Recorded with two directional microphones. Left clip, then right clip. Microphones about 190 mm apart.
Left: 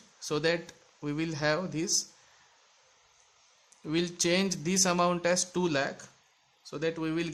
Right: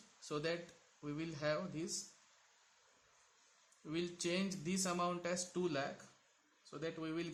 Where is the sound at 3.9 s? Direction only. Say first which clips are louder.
Left 12 dB; 40° left (ahead or behind).